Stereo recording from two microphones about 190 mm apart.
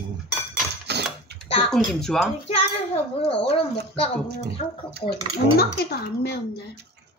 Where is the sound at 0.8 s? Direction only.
60° right (ahead or behind).